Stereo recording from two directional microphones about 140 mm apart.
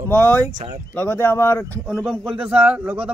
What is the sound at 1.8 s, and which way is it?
A man's voice, centre (ahead or behind).